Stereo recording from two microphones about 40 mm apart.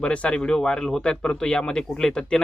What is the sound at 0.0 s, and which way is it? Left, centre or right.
Speech, left.